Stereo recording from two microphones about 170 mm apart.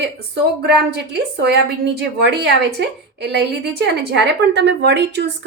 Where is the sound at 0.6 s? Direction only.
80° right.